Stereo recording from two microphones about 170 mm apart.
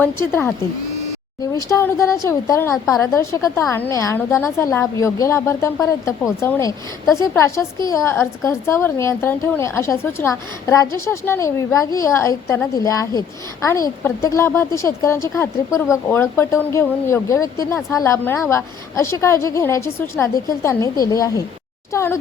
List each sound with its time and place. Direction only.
0.0 s a woman's voice: 15° left (ahead or behind)